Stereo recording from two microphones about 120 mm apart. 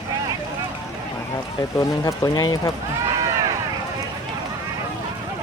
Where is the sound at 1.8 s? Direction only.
30° left (ahead or behind).